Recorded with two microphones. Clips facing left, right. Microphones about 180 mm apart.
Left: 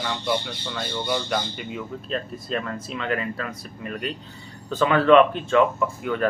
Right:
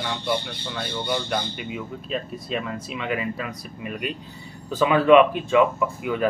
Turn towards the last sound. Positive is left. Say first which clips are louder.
# even
turn(degrees=-5)  # may be behind; listen again after turning